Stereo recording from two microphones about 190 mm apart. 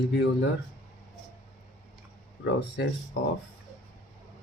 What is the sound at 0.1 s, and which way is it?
Speech, 65° left (ahead or behind).